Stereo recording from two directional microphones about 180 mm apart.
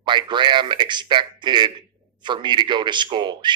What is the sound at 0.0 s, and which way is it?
Speech, 25° right (ahead or behind).